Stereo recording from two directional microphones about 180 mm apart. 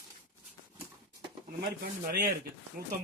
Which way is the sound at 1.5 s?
60° right (ahead or behind).